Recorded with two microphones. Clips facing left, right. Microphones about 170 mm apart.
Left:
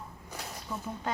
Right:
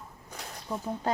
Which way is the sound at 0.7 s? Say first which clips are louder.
Right 5 dB; 30° right (ahead or behind).